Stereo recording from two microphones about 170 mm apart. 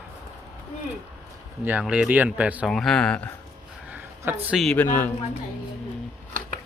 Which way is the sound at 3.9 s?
5° right (ahead or behind).